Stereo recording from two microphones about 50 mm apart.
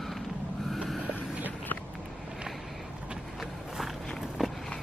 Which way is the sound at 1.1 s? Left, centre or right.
Right.